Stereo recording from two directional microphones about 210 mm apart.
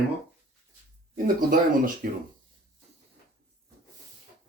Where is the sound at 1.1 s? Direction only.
40° right (ahead or behind).